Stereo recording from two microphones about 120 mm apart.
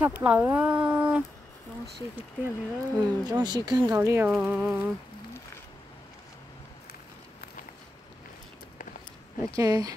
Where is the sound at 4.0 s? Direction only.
20° right (ahead or behind).